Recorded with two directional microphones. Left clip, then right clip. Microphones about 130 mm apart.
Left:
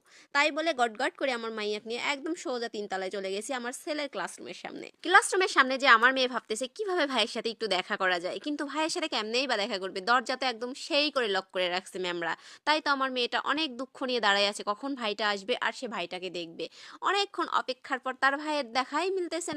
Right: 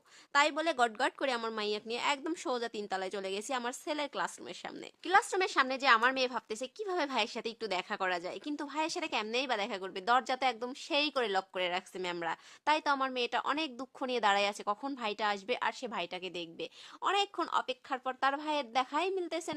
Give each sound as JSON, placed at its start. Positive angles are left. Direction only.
{"t": 0.3, "sound": "a woman's voice", "side_deg": 15}
{"t": 5.0, "sound": "a woman's voice", "side_deg": 30}